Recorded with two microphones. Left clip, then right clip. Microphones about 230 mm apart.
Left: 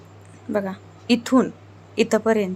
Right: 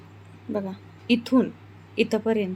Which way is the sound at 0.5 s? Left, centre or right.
Centre.